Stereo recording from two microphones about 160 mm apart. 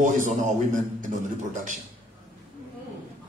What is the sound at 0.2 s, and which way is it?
Speech, 50° right (ahead or behind).